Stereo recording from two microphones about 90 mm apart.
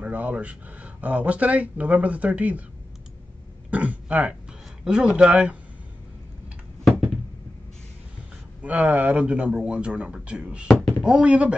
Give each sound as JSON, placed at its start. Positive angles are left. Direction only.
{"t": 0.0, "sound": "speech", "side_deg": -15}
{"t": 3.7, "sound": "speech", "side_deg": -15}
{"t": 6.8, "sound": "a sound", "side_deg": 0}
{"t": 8.6, "sound": "speech", "side_deg": -15}